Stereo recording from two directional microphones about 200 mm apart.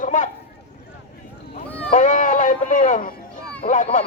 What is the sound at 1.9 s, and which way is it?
A man's voice, 40° left (ahead or behind).